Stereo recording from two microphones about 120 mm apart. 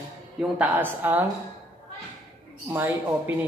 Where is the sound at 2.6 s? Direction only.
20° right (ahead or behind).